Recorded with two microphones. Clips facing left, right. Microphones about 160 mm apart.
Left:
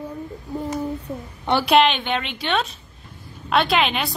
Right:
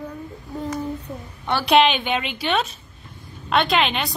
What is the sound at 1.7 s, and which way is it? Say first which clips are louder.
A woman's voice: right 1 dB; centre (ahead or behind).